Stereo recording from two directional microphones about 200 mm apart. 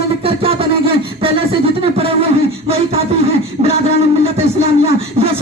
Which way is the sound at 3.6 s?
30° right (ahead or behind).